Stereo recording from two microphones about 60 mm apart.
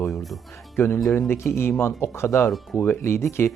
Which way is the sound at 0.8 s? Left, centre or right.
Left.